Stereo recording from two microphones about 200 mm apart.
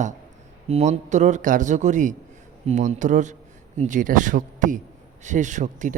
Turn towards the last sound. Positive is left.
turn(degrees=-40)  # may be behind; listen again after turning